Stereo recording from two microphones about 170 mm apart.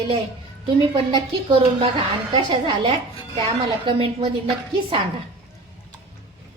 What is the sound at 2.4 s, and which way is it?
A woman's voice, 30° right (ahead or behind).